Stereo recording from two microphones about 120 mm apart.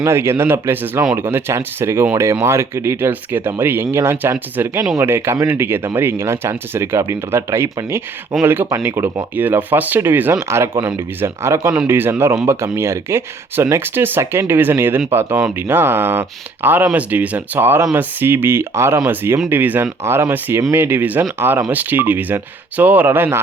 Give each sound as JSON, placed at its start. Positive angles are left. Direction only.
{"t": 0.0, "sound": "speech", "side_deg": -20}
{"t": 12.5, "sound": "speech", "side_deg": -20}